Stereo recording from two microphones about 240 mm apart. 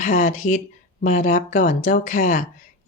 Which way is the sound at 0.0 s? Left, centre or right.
Left.